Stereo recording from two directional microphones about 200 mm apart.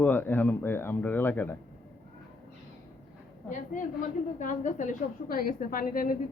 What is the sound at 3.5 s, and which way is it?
A woman's voice, 40° left (ahead or behind).